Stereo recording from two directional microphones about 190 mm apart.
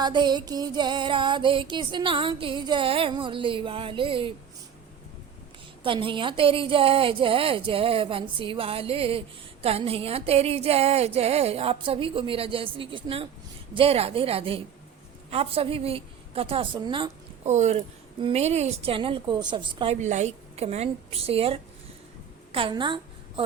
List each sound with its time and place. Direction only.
0.0 s a woman's voice: 25° right (ahead or behind)
5.8 s a woman's voice: 25° right (ahead or behind)
17.5 s a woman's voice: 40° right (ahead or behind)